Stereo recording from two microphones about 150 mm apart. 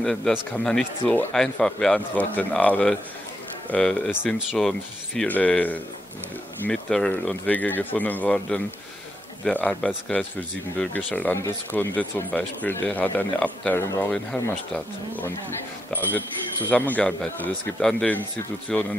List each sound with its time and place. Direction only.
0.0 s speech: 5° left (ahead or behind); by 14.1 s 20° left (ahead or behind)
15.9 s speech: 10° left (ahead or behind)